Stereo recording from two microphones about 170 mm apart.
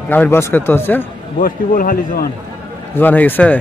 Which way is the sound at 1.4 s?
55° left (ahead or behind).